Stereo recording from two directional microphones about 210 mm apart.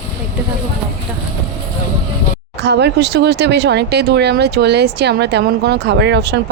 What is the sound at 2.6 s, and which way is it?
Speech, 55° right (ahead or behind).